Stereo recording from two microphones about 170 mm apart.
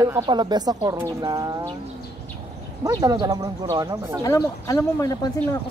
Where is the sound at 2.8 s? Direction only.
20° right (ahead or behind).